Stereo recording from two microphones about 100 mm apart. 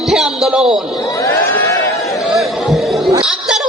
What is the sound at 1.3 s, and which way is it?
Speech, 20° left (ahead or behind).